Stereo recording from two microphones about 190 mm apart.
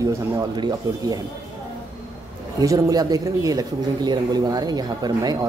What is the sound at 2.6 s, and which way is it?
Speech, 20° right (ahead or behind).